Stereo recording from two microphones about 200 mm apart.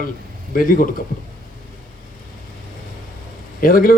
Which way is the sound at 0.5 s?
45° left (ahead or behind).